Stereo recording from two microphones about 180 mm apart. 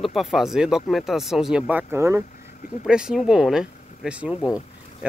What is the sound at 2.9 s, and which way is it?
Speech, 5° right (ahead or behind).